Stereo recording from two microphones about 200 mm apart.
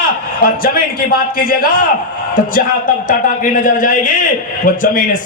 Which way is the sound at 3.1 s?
40° left (ahead or behind).